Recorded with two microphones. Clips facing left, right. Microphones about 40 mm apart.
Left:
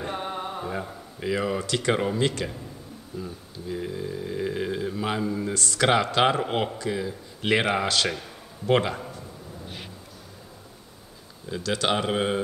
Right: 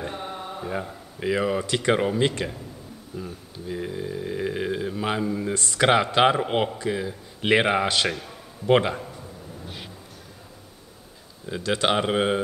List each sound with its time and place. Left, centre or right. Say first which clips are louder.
0.1 s mantra: left 2 dB; left
0.7 s speech: right 1 dB; centre
5.5 s speech: right 2 dB; centre
11.4 s speech: right 2 dB; right